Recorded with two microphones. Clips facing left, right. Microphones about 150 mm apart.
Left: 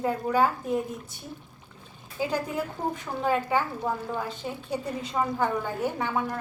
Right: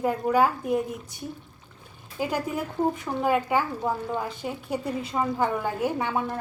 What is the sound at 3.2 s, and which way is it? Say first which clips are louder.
A woman's voice: right 1 dB; 15° right (ahead or behind).